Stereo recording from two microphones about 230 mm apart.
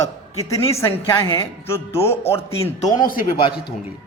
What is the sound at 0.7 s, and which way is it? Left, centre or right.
Speech, centre.